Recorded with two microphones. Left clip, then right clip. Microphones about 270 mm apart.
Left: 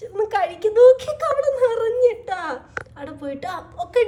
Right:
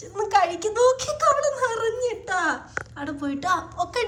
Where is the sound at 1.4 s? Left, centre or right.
Centre.